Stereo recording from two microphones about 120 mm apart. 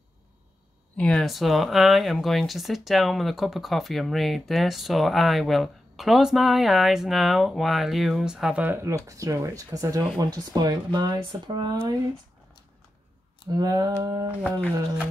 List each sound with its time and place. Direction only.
0.9 s speech: 5° left (ahead or behind)
8.6 s speech: 25° right (ahead or behind)
13.5 s a sound: 30° right (ahead or behind)